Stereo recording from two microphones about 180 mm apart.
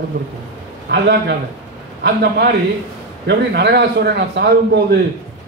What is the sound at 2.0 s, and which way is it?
A man's voice, 70° right (ahead or behind).